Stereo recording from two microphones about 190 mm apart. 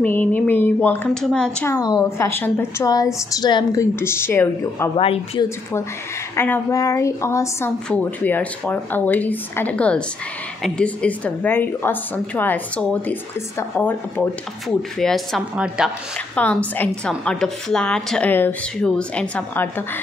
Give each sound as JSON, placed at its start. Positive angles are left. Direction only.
{"t": 0.0, "sound": "a woman's voice", "side_deg": 10}
{"t": 1.7, "sound": "a woman's voice", "side_deg": 20}
{"t": 4.9, "sound": "speech", "side_deg": 30}
{"t": 6.3, "sound": "a woman's voice", "side_deg": 10}
{"t": 16.3, "sound": "a woman's voice", "side_deg": 10}